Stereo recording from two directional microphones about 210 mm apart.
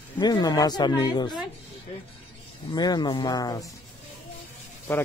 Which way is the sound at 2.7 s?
20° left (ahead or behind).